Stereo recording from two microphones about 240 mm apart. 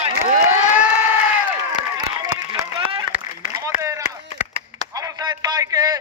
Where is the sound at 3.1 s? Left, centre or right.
Centre.